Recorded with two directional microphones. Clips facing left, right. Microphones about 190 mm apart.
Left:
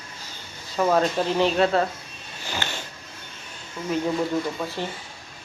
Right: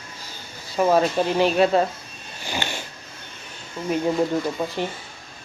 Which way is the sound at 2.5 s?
15° right (ahead or behind).